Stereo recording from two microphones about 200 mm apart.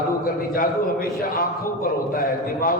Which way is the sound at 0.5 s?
45° left (ahead or behind).